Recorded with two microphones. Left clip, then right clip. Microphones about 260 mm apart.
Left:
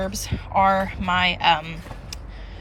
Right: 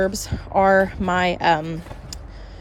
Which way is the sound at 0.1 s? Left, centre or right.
Centre.